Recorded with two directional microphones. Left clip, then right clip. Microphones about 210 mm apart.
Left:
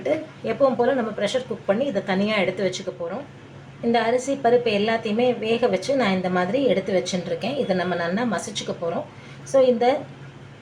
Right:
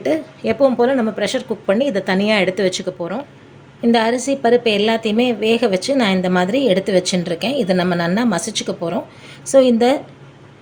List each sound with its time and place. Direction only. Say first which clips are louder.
0.0 s a woman's voice: right 5 dB; 45° right (ahead or behind)